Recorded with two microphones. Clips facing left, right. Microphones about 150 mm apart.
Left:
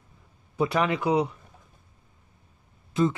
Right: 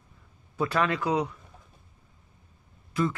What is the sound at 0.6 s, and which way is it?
Speech, 20° left (ahead or behind).